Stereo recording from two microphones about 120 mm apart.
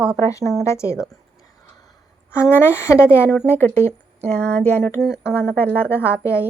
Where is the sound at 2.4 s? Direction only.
20° left (ahead or behind).